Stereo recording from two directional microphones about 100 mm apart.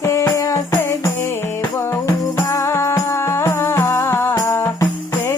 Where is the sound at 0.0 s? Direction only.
25° left (ahead or behind).